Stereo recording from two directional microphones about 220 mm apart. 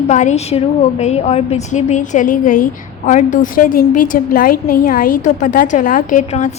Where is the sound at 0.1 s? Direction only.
35° left (ahead or behind).